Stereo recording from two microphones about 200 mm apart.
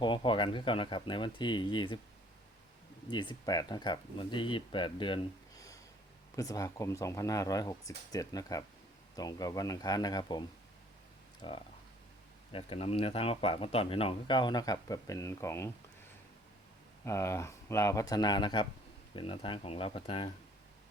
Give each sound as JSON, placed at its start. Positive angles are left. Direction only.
{"t": 0.0, "sound": "speech", "side_deg": 25}
{"t": 3.1, "sound": "speech", "side_deg": 20}
{"t": 11.4, "sound": "speech", "side_deg": 25}
{"t": 17.1, "sound": "speech", "side_deg": 15}